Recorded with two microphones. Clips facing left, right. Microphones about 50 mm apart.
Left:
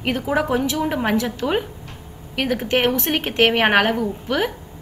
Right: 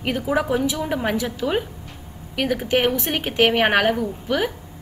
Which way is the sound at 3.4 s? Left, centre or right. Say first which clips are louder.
Left 1 dB; centre.